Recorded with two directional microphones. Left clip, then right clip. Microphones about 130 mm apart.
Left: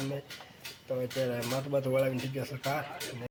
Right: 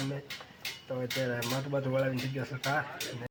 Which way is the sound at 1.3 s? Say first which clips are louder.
Left 1 dB; 15° left (ahead or behind).